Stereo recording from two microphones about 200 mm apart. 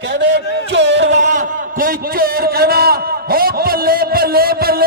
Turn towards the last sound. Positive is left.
turn(degrees=-50)  # may be behind; listen again after turning